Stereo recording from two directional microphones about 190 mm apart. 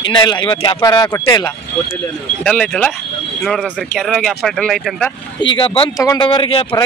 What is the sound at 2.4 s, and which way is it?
Speech, 5° left (ahead or behind).